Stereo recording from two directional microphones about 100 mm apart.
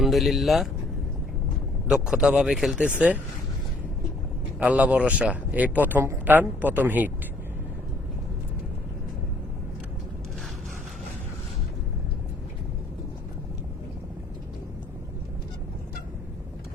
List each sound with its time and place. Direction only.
0.0 s speech: centre (ahead or behind)
1.9 s speech: 5° right (ahead or behind)
4.6 s speech: 15° right (ahead or behind)